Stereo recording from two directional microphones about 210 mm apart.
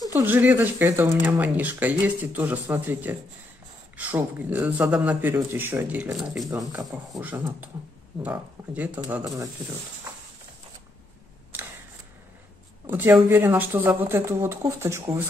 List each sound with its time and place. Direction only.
0.1 s speech: 10° right (ahead or behind)
6.5 s speech: 15° right (ahead or behind)
6.9 s speech: 5° right (ahead or behind)
12.8 s speech: 10° right (ahead or behind)